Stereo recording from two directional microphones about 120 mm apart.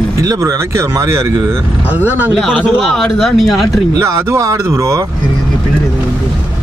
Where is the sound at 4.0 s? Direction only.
25° right (ahead or behind).